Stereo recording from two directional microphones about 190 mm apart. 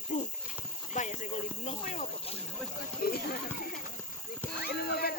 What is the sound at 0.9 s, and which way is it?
Speech, 40° left (ahead or behind).